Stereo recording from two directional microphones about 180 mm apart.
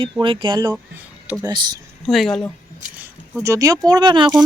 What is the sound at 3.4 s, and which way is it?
Speech, 20° right (ahead or behind).